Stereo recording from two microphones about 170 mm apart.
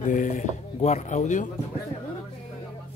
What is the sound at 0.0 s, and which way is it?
Speech, 50° left (ahead or behind).